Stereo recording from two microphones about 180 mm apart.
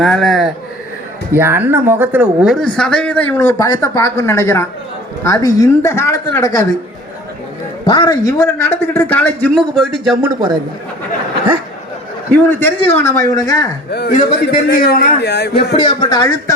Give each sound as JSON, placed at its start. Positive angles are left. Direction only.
{"t": 0.0, "sound": "speech", "side_deg": 0}
{"t": 1.3, "sound": "a man's voice", "side_deg": -10}
{"t": 7.9, "sound": "a man's voice", "side_deg": 25}
{"t": 12.3, "sound": "a man's voice", "side_deg": 10}
{"t": 14.1, "sound": "a man's voice", "side_deg": 50}
{"t": 15.5, "sound": "speech", "side_deg": 30}